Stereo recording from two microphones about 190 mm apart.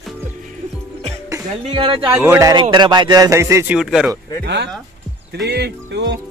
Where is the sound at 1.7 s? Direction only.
30° right (ahead or behind).